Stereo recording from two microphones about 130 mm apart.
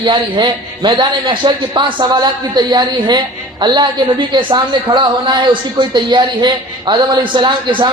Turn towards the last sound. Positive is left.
turn(degrees=-40)  # may be behind; listen again after turning